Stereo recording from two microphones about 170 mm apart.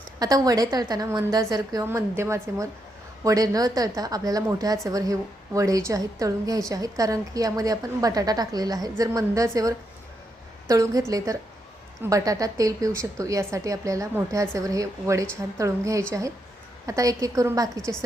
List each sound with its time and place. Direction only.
0.2 s a woman's voice: 20° right (ahead or behind)